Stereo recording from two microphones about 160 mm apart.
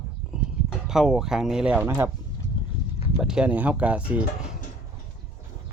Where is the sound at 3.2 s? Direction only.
5° right (ahead or behind).